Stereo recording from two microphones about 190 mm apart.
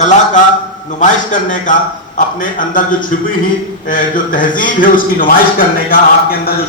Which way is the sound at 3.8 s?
45° left (ahead or behind).